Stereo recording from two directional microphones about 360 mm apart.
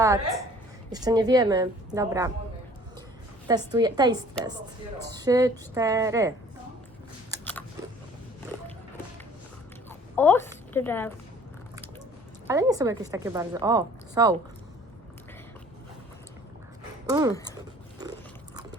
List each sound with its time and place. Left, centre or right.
0.9 s a woman's voice: centre
3.4 s a woman's voice: centre
10.2 s a woman's voice: centre
12.5 s a woman's voice: centre
17.1 s a woman's voice: centre